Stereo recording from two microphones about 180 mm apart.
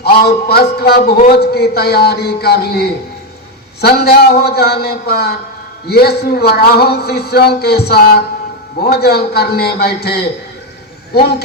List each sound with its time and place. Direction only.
0.0 s speech: 60° left (ahead or behind)